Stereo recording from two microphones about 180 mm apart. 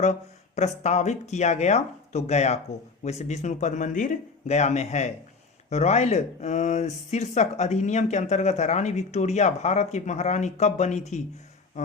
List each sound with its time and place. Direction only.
0.0 s speech: 40° left (ahead or behind)